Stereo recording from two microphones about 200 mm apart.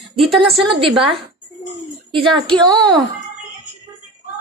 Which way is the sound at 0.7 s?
25° right (ahead or behind).